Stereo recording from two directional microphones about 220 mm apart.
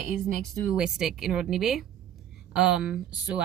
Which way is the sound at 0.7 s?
5° right (ahead or behind).